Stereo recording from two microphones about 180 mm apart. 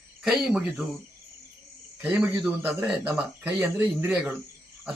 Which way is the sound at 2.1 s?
5° right (ahead or behind).